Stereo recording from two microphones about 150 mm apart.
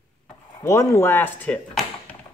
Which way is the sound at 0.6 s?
20° left (ahead or behind).